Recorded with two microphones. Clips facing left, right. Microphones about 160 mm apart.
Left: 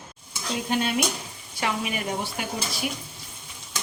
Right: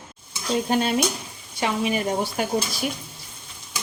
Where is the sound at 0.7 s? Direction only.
35° right (ahead or behind).